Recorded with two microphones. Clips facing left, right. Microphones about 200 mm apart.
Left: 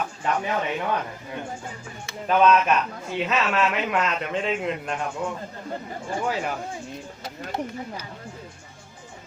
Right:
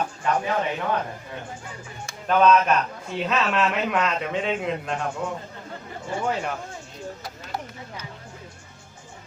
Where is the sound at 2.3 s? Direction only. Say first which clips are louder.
Right 1 dB; 5° left (ahead or behind).